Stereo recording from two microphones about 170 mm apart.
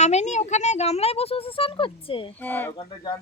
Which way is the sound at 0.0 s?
40° left (ahead or behind).